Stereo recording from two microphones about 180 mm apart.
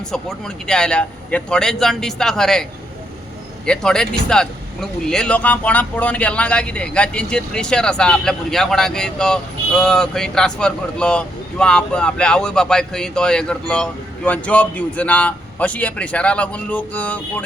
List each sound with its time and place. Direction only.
0.1 s speech: 5° left (ahead or behind)
3.7 s a man's voice: 5° left (ahead or behind)